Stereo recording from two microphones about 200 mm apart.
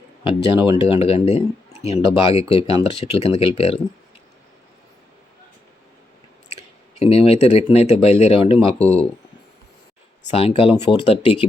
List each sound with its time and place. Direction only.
0.8 s speech: 30° left (ahead or behind)
6.5 s speech: 30° left (ahead or behind)
10.2 s speech: 30° left (ahead or behind)